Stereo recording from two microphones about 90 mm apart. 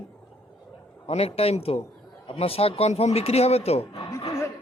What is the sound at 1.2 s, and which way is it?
Speech, 90° left.